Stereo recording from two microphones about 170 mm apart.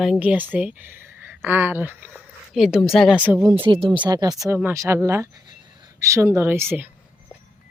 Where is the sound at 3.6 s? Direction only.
30° right (ahead or behind); by 6.9 s 10° right (ahead or behind).